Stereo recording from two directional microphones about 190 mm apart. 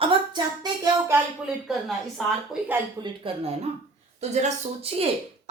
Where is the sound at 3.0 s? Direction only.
30° right (ahead or behind).